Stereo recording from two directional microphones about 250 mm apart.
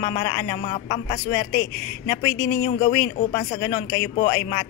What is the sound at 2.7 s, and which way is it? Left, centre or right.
Speech, left.